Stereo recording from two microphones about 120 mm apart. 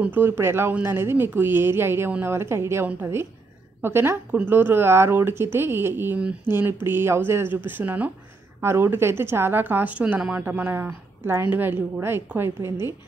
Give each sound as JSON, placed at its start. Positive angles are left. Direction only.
{"t": 0.0, "sound": "speech", "side_deg": -15}